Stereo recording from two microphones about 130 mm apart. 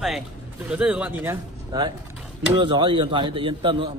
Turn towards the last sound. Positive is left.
turn(degrees=-45)  # may be behind; listen again after turning